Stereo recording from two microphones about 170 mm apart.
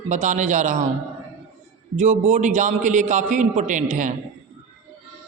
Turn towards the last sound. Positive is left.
turn(degrees=-50)  # may be behind; listen again after turning